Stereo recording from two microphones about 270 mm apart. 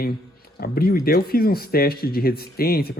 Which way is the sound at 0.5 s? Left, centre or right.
Left.